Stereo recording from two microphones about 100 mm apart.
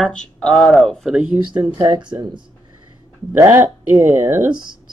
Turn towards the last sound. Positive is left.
turn(degrees=-20)  # may be behind; listen again after turning